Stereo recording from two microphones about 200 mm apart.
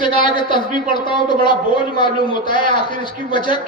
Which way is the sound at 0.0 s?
25° left (ahead or behind).